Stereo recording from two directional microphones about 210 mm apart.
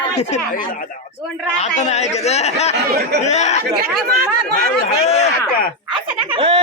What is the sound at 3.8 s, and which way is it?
Speech, 45° right (ahead or behind).